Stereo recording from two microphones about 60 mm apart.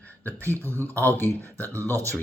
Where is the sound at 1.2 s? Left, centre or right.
Right.